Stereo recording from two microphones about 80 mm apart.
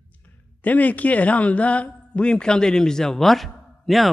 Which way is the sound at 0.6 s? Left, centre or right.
Centre.